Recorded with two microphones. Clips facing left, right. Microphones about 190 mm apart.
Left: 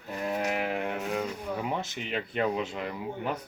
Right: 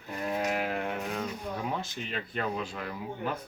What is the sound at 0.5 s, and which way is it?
Speech, 15° left (ahead or behind).